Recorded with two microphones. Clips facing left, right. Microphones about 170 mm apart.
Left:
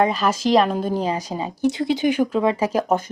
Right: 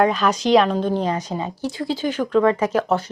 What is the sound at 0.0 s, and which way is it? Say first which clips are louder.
A woman's voice: right 1 dB; centre (ahead or behind).